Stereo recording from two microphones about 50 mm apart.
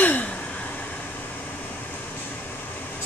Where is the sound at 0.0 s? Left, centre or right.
Left.